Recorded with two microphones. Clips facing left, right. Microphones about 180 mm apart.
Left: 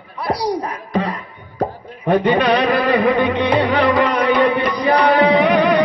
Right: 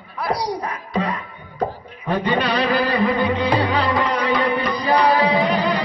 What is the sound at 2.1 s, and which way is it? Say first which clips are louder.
Music: left 6 dB; 65° left (ahead or behind).